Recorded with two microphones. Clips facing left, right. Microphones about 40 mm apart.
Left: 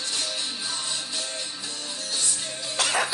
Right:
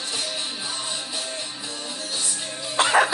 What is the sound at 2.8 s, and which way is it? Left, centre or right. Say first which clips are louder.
Music: right 7 dB; right.